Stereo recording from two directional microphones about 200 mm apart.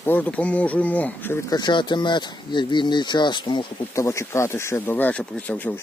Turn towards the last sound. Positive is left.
turn(degrees=5)  # may be behind; listen again after turning